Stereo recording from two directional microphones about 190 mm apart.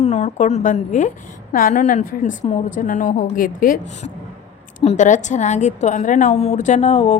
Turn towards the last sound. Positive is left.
turn(degrees=35)  # may be behind; listen again after turning